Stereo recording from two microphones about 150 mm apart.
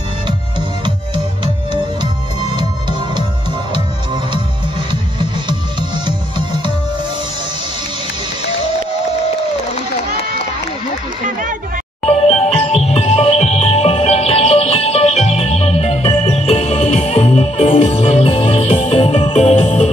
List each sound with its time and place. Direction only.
0.6 s music: 30° right (ahead or behind)
12.1 s music: 40° left (ahead or behind)